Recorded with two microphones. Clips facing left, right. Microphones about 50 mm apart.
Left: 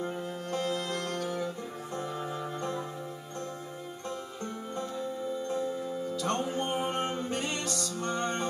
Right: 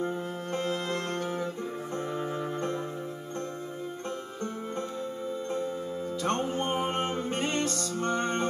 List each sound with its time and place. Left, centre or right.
0.0 s music: right
6.1 s music: right